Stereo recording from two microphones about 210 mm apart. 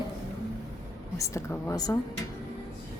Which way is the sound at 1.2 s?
15° left (ahead or behind).